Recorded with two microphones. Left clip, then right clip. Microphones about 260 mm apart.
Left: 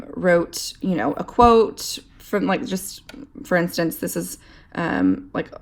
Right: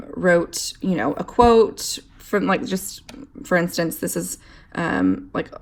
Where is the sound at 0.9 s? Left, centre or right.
Left.